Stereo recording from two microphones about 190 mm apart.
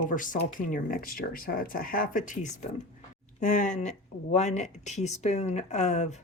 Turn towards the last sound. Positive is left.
turn(degrees=35)  # may be behind; listen again after turning